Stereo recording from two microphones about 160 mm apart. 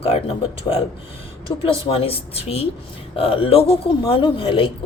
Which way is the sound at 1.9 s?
40° left (ahead or behind).